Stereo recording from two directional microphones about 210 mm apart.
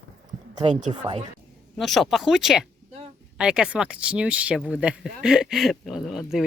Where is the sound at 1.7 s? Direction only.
Centre (ahead or behind).